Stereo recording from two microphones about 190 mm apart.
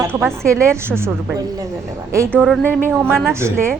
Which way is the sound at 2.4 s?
5° left (ahead or behind).